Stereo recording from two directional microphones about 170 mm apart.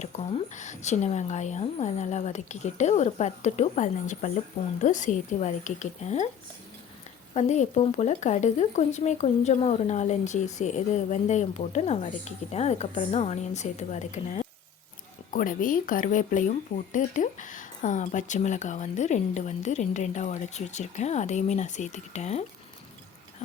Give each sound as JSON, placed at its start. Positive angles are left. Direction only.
{"t": 0.1, "sound": "speech", "side_deg": 40}
{"t": 7.3, "sound": "speech", "side_deg": 40}